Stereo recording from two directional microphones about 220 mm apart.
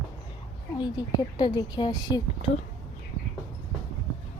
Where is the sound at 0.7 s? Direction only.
20° left (ahead or behind).